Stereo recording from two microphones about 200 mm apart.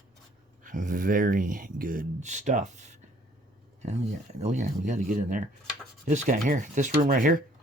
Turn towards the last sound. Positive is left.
turn(degrees=-45)  # may be behind; listen again after turning